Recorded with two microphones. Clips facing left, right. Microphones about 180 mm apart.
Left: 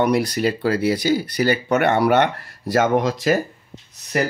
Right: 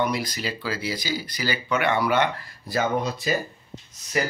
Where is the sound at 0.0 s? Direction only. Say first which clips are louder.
Left 8 dB; 65° left (ahead or behind); by 3.3 s 85° left.